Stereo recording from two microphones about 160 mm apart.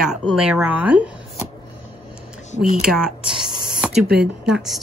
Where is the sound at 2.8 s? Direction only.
5° right (ahead or behind).